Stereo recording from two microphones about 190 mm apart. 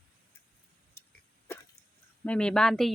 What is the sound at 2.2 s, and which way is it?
Speech, 5° left (ahead or behind).